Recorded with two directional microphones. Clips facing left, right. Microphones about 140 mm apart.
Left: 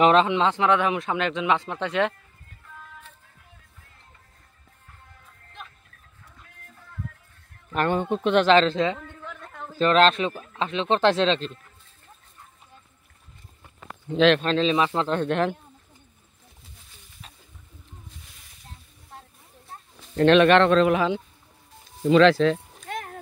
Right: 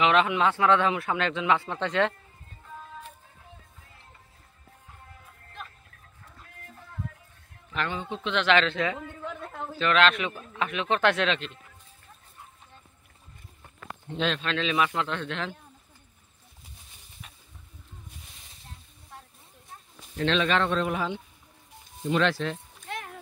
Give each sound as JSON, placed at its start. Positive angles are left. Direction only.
{"t": 0.0, "sound": "speech", "side_deg": 30}
{"t": 5.1, "sound": "music", "side_deg": -5}
{"t": 7.7, "sound": "speech", "side_deg": 50}
{"t": 8.5, "sound": "speech", "side_deg": 35}
{"t": 9.0, "sound": "a sound", "side_deg": -10}
{"t": 9.8, "sound": "speech", "side_deg": 35}
{"t": 14.1, "sound": "speech", "side_deg": 90}
{"t": 14.4, "sound": "speech", "side_deg": 35}
{"t": 20.2, "sound": "speech", "side_deg": 60}
{"t": 22.8, "sound": "a sound", "side_deg": 45}